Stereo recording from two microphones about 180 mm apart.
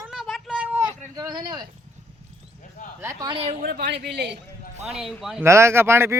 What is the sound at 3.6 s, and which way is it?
Speech, 55° right (ahead or behind).